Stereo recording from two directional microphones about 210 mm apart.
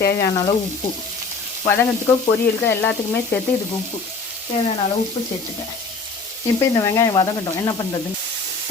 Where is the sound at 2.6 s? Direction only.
10° left (ahead or behind).